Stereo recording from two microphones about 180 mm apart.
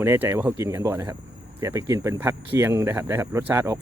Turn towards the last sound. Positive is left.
turn(degrees=-15)  # may be behind; listen again after turning